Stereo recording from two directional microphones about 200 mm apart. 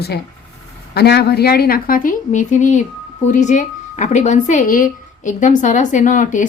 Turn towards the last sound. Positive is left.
turn(degrees=40)  # may be behind; listen again after turning